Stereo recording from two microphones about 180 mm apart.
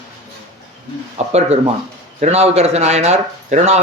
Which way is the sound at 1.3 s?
35° right (ahead or behind).